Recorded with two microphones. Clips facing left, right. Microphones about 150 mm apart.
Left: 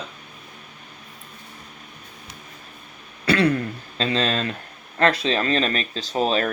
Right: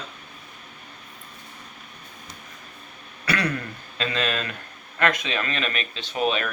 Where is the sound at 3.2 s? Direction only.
25° left (ahead or behind).